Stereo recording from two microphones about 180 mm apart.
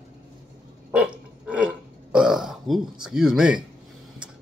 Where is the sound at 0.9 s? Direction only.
5° right (ahead or behind).